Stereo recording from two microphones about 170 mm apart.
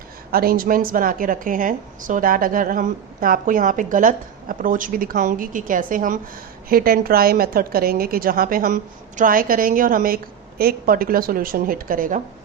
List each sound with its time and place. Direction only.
0.3 s a woman's voice: 60° right (ahead or behind)